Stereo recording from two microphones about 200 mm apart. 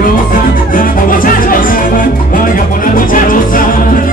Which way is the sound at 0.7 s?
45° left (ahead or behind).